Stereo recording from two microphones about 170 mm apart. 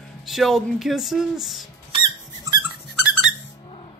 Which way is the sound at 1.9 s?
25° right (ahead or behind).